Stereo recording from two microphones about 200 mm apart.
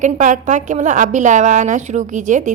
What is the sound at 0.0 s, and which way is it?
A woman's voice, 40° right (ahead or behind).